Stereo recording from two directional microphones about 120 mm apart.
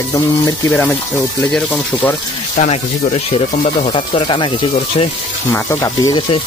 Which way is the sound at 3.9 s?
45° left (ahead or behind).